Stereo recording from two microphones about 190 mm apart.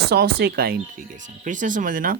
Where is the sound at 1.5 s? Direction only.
45° right (ahead or behind).